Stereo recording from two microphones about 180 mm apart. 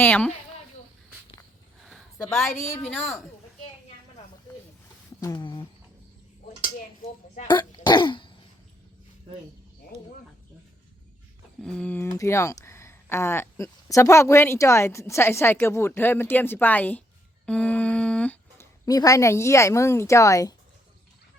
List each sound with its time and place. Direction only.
0.0 s speech: 10° left (ahead or behind)
1.8 s a sound: centre (ahead or behind)
2.3 s a woman's voice: centre (ahead or behind)
5.2 s speech: 20° left (ahead or behind)
7.4 s speech: 25° left (ahead or behind)
11.6 s speech: 5° left (ahead or behind)